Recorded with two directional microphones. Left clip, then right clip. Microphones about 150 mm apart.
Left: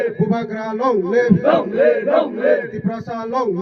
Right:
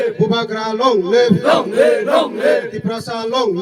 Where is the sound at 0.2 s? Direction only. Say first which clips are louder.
Right 4 dB; 55° right (ahead or behind).